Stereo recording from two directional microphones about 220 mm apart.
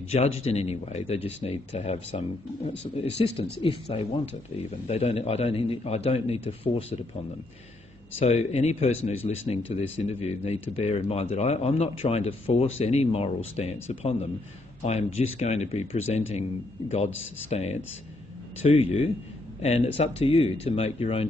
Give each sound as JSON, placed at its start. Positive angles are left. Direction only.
{"t": 0.1, "sound": "speech", "side_deg": 30}
{"t": 8.2, "sound": "speech", "side_deg": 25}
{"t": 17.5, "sound": "speech", "side_deg": 30}